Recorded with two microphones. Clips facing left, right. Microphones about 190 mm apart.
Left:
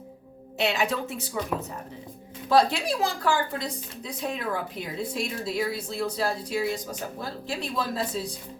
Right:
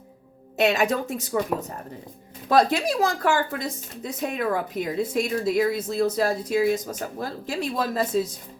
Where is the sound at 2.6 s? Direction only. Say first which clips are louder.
Right 3 dB; 50° right (ahead or behind).